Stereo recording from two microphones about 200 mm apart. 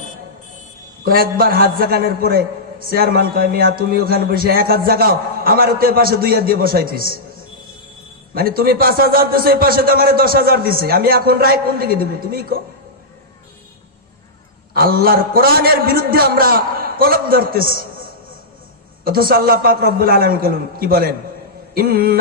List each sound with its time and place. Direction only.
1.0 s a man's voice: 45° right (ahead or behind)
8.4 s a man's voice: 50° right (ahead or behind)
14.7 s a man's voice: 50° right (ahead or behind)